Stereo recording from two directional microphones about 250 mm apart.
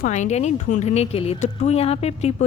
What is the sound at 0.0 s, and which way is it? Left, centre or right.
Speech, left.